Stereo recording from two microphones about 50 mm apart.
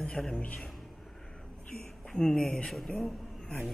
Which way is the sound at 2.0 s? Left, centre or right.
Centre.